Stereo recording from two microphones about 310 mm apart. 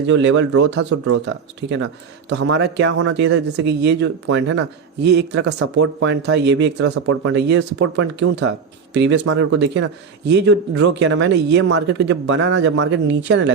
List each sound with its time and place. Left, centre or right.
0.1 s speech: right
2.3 s speech: right